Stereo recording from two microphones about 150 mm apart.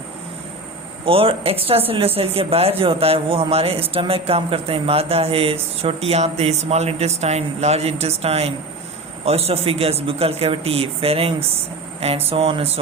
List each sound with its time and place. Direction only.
1.0 s speech: 40° right (ahead or behind)